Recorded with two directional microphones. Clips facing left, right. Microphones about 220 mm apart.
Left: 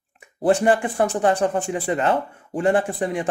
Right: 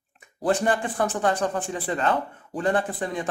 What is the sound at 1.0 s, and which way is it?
Speech, 30° left (ahead or behind).